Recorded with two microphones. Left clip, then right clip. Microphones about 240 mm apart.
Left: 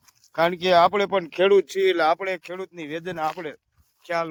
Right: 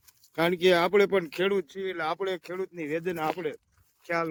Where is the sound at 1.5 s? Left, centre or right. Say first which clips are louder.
Left 12 dB; left.